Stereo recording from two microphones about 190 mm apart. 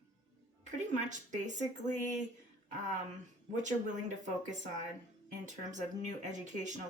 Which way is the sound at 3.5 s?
40° right (ahead or behind).